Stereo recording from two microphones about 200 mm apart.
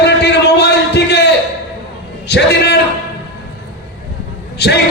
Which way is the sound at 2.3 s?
55° left (ahead or behind).